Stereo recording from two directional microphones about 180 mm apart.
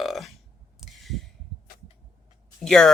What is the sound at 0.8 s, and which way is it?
Heart sounds, centre (ahead or behind).